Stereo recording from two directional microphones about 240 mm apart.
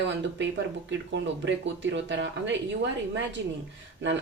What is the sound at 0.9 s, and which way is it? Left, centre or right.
Speech, right.